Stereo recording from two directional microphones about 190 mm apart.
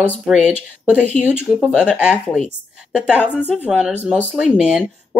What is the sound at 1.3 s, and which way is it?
Speech, 10° left (ahead or behind).